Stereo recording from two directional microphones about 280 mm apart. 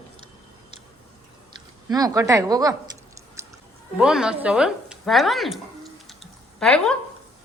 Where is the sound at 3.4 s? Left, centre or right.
Centre.